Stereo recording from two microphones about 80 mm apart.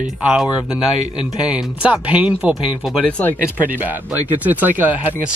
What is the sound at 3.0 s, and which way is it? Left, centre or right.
Speech, centre.